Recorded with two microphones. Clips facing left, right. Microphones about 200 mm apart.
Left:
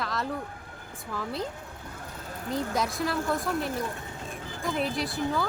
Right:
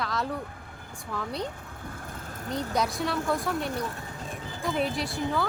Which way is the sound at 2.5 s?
Centre (ahead or behind).